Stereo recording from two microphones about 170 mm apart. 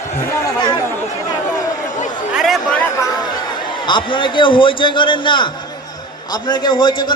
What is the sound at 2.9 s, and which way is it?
A man's voice, 20° left (ahead or behind).